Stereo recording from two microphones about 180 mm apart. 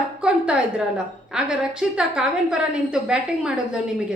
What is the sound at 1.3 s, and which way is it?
A woman's voice, 5° right (ahead or behind).